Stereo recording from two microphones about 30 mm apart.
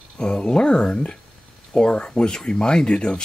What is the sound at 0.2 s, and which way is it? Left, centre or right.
Speech, left.